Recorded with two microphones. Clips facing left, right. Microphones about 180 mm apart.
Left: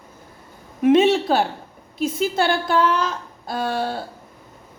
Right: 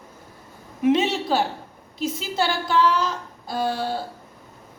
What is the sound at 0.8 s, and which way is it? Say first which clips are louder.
A woman's voice: left 5 dB; 55° left (ahead or behind).